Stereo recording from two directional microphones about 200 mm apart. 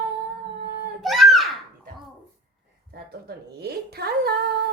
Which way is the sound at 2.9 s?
50° right (ahead or behind).